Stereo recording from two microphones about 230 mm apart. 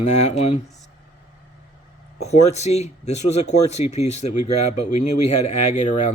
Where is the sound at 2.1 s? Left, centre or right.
Left.